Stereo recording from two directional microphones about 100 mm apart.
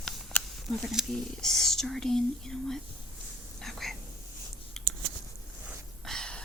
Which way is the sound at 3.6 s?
5° left (ahead or behind).